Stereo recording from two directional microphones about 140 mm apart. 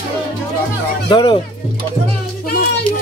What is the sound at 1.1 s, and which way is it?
Music, 35° left (ahead or behind).